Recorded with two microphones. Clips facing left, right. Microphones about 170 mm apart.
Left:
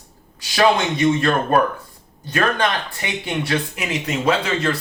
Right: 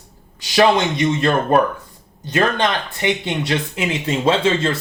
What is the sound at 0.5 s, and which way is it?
Speech, 20° right (ahead or behind).